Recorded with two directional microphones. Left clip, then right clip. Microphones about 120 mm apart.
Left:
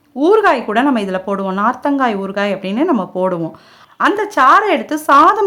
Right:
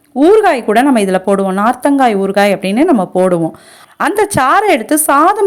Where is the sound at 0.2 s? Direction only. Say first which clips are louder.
Right 3 dB; 25° right (ahead or behind).